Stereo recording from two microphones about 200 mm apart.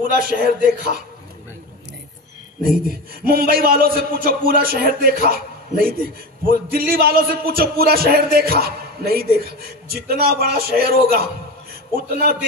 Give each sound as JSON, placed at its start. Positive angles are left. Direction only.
{"t": 0.0, "sound": "a man's voice", "side_deg": -45}
{"t": 2.9, "sound": "a man's voice", "side_deg": -45}